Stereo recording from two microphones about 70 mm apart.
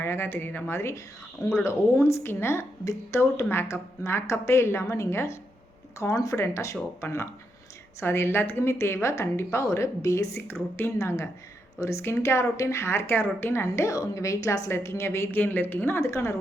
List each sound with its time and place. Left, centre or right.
0.0 s a woman's voice: left
3.2 s a woman's voice: left
6.0 s a woman's voice: left
13.9 s a woman's voice: left
16.0 s a woman's voice: left